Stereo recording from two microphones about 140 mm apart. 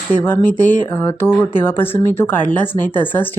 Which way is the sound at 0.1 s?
15° left (ahead or behind).